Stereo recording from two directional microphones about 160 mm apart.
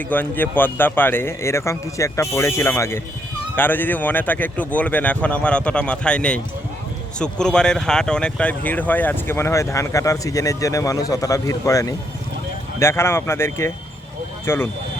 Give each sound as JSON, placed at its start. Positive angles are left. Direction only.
{"t": 0.1, "sound": "a man's voice", "side_deg": 10}